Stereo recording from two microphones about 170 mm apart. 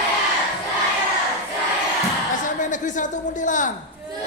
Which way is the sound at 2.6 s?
50° left (ahead or behind).